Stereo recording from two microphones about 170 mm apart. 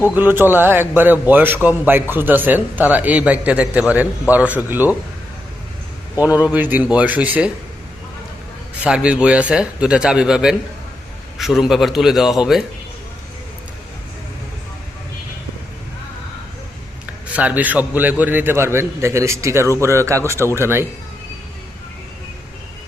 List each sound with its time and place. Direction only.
0.0 s a man's voice: 10° right (ahead or behind)
6.4 s a man's voice: 10° right (ahead or behind)
8.8 s speech: 5° right (ahead or behind)
17.3 s a man's voice: 10° right (ahead or behind)